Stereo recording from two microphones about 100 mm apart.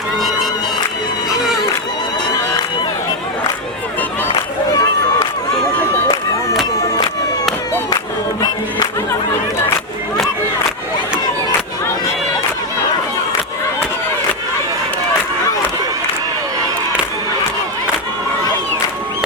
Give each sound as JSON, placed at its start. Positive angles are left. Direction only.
{"t": 4.4, "sound": "run", "side_deg": 40}